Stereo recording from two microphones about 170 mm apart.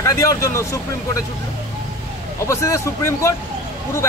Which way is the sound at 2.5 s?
20° left (ahead or behind).